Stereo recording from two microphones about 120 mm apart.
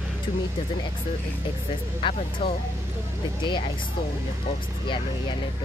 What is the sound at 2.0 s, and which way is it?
Speech, 50° left (ahead or behind).